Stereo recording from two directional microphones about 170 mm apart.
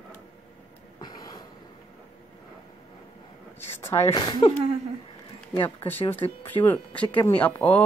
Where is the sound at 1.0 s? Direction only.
25° left (ahead or behind).